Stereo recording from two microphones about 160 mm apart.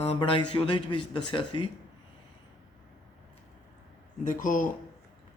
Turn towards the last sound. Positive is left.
turn(degrees=55)  # may be behind; listen again after turning